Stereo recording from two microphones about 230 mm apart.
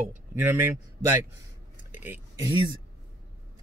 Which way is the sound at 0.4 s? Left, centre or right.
Centre.